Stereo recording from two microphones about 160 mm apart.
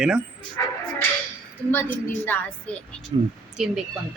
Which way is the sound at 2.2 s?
10° left (ahead or behind).